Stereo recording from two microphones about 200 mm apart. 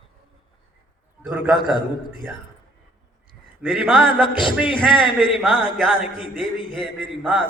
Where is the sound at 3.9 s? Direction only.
25° left (ahead or behind).